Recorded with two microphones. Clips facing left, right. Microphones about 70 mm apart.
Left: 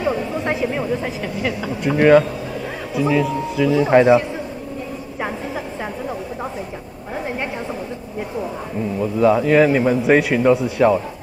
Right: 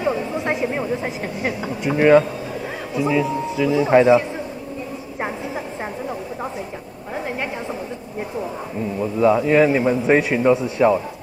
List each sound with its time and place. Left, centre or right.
0.0 s a sound: centre; by 1.5 s right
1.9 s speech: centre
3.8 s a man's voice: centre
9.0 s speech: centre